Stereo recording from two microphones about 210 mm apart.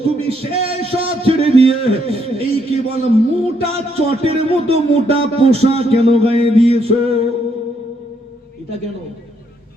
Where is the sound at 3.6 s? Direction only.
30° right (ahead or behind).